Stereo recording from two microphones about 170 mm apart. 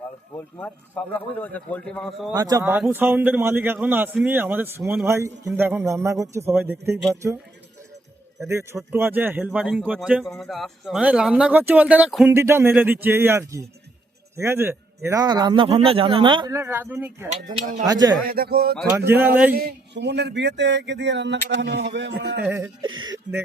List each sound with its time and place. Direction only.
0.6 s speech: 10° left (ahead or behind)
2.3 s speech: 20° right (ahead or behind)
8.4 s speech: 15° right (ahead or behind)
12.3 s a man's voice: 15° right (ahead or behind)
16.5 s speech: 15° right (ahead or behind)
17.4 s speech: 50° right (ahead or behind)
17.8 s a man's voice: 25° right (ahead or behind)
18.2 s speech: 60° right (ahead or behind)
18.9 s speech: 15° right (ahead or behind)
19.5 s a sound: 75° right (ahead or behind)
22.4 s speech: 10° right (ahead or behind)
22.8 s a man's voice: 25° right (ahead or behind)